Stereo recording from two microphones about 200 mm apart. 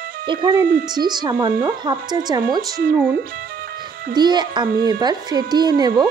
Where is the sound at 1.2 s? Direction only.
15° right (ahead or behind).